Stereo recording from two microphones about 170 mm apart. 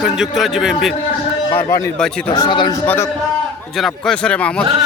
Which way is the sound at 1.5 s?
15° left (ahead or behind).